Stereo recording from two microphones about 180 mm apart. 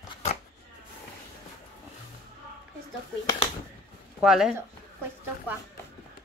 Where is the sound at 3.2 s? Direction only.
25° left (ahead or behind).